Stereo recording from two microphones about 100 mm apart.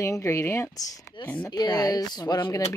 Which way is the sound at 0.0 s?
30° left (ahead or behind).